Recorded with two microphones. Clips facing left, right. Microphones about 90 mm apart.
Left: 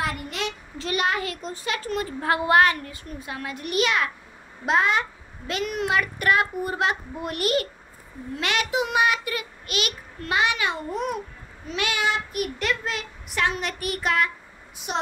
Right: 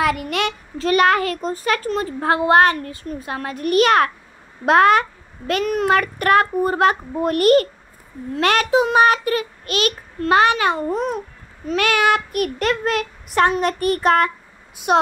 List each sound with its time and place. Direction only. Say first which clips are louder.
0.0 s speech: right 9 dB; 75° right (ahead or behind)
0.7 s child singing: right 10 dB; 50° right (ahead or behind)
1.9 s a woman's voice: right 5 dB; 35° right (ahead or behind); by 5.0 s 55° right (ahead or behind)
5.5 s child singing: right 8 dB; 45° right (ahead or behind)
11.6 s child singing: right 8 dB; 50° right (ahead or behind)
14.9 s a child's voice: right 11 dB; 65° right (ahead or behind)